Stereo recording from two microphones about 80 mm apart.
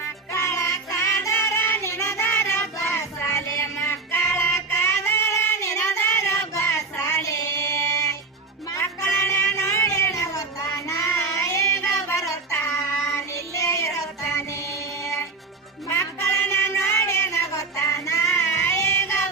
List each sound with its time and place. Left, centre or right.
0.3 s music: left
7.0 s child singing: left
8.7 s music: left
15.9 s a sound: left